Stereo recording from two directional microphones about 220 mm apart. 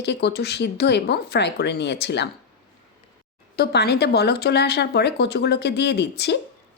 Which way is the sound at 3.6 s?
45° left (ahead or behind).